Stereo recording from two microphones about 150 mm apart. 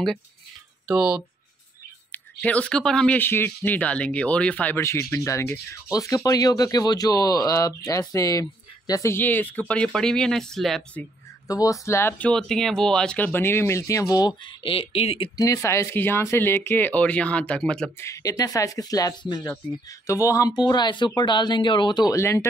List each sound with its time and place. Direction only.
0.8 s speech: 5° right (ahead or behind)
2.4 s speech: 10° left (ahead or behind)
3.2 s speech: 15° left (ahead or behind)
11.4 s speech: 25° left (ahead or behind); by 15.3 s 40° left (ahead or behind)
15.3 s speech: 20° left (ahead or behind); by 17.9 s 5° left (ahead or behind)
18.0 s speech: 20° left (ahead or behind)